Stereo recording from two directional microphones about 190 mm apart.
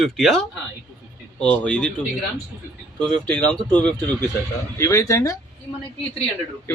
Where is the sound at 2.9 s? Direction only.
5° left (ahead or behind).